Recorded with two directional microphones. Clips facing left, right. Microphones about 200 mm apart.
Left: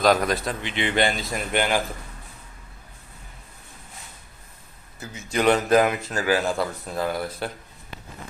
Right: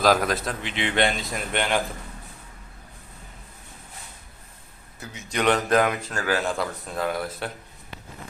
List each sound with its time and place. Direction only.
0.0 s a man's voice: centre (ahead or behind)
4.9 s a man's voice: centre (ahead or behind)